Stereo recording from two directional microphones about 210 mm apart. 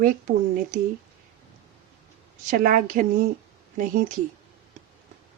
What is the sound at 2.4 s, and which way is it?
Speech, 40° right (ahead or behind).